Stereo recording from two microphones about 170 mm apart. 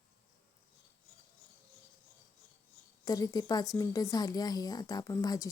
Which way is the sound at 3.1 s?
20° left (ahead or behind).